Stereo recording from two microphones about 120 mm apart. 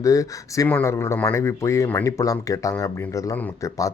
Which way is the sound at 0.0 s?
30° left (ahead or behind).